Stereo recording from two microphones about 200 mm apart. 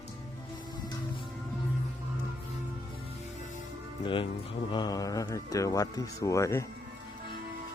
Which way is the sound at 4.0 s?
25° left (ahead or behind).